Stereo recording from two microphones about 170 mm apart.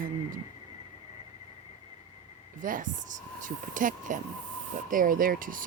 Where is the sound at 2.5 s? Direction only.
50° right (ahead or behind).